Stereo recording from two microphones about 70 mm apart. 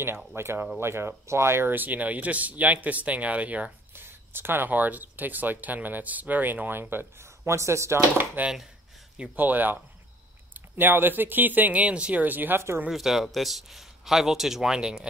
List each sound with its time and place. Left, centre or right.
0.4 s speech: right
3.9 s speech: right
8.4 s speech: right
12.9 s speech: centre